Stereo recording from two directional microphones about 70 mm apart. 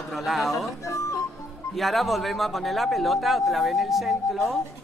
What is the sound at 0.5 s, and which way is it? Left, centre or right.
Speech, left.